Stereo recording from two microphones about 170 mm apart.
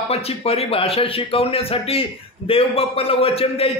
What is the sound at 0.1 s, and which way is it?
A man's voice, 35° left (ahead or behind).